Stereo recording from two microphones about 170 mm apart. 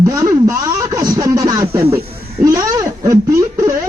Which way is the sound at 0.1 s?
20° right (ahead or behind).